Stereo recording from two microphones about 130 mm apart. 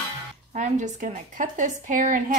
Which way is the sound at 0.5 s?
70° right (ahead or behind).